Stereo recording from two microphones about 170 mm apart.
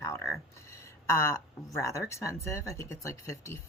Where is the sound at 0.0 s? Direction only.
15° left (ahead or behind).